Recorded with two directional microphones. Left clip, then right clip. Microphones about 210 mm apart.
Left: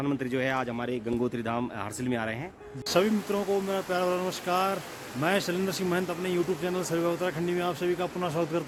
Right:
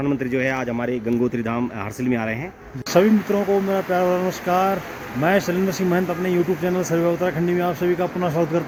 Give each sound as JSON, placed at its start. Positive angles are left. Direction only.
{"t": 0.0, "sound": "speech", "side_deg": 25}
{"t": 2.9, "sound": "speech", "side_deg": 10}